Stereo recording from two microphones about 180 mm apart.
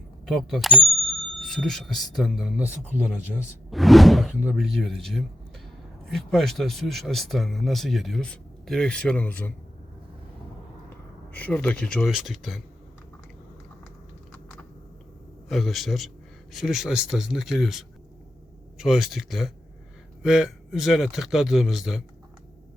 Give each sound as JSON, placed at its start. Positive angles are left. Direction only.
{"t": 0.3, "sound": "speech", "side_deg": 0}
{"t": 11.3, "sound": "speech", "side_deg": 10}
{"t": 15.4, "sound": "speech", "side_deg": 0}